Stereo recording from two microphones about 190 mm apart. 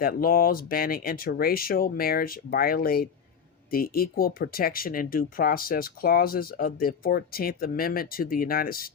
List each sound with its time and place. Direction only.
0.0 s speech: 50° left (ahead or behind)